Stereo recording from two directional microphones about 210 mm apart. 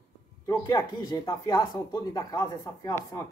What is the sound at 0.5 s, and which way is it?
Speech, 20° left (ahead or behind).